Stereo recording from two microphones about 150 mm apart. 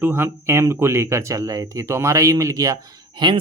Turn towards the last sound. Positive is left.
turn(degrees=-30)  # may be behind; listen again after turning